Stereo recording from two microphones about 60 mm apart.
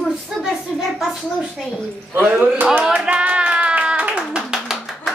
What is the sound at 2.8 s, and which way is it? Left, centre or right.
Clapping, centre.